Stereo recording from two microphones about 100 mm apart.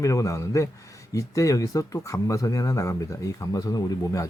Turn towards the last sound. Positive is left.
turn(degrees=35)  # may be behind; listen again after turning